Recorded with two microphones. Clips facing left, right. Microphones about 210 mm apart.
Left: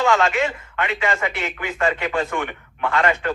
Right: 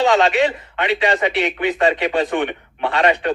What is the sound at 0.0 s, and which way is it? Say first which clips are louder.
A man's voice: right 4 dB; 20° right (ahead or behind).